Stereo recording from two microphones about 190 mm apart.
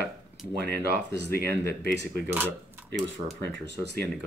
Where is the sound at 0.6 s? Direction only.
60° right (ahead or behind).